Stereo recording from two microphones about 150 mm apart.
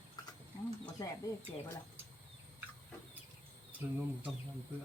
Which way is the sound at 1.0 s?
20° left (ahead or behind).